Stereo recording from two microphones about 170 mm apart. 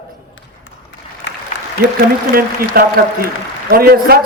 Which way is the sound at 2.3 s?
60° right (ahead or behind).